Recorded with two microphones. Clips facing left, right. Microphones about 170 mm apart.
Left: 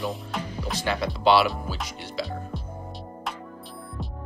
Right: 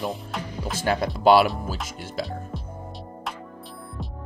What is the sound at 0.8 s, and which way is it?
Speech, 45° right (ahead or behind).